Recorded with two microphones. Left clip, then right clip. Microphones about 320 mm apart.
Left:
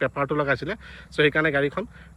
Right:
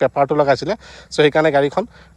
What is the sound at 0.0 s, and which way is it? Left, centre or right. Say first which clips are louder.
Speech: right 9 dB; centre.